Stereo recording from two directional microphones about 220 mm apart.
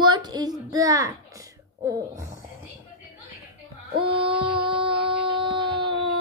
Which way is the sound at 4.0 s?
25° right (ahead or behind).